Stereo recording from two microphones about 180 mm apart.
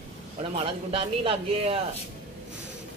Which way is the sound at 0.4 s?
30° right (ahead or behind).